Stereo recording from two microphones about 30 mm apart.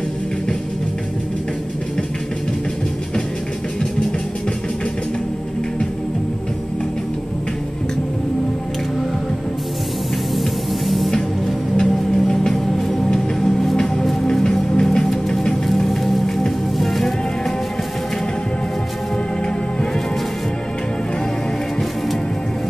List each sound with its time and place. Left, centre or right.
11.8 s music: centre
14.4 s music: left; by 17.1 s centre